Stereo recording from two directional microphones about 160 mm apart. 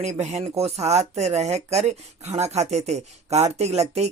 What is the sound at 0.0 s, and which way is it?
Speech, 45° right (ahead or behind).